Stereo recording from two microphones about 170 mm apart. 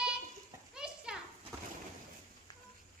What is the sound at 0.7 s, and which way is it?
Children playing, 5° right (ahead or behind).